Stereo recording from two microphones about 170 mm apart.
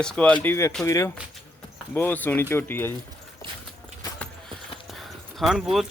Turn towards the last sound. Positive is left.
turn(degrees=0)  # may be behind; listen again after turning